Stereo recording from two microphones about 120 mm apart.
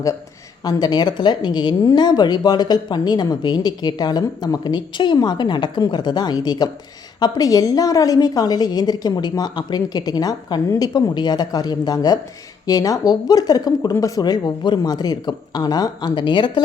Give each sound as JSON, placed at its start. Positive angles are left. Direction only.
{"t": 0.6, "sound": "speech", "side_deg": 35}